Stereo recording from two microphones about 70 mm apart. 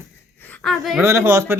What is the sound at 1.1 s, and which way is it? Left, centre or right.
Speech, right.